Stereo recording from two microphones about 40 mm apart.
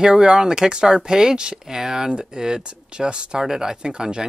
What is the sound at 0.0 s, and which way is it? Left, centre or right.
Speech, centre.